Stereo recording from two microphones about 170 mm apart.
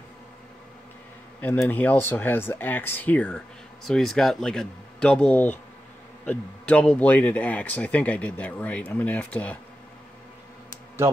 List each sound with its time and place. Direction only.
1.4 s speech: 10° left (ahead or behind)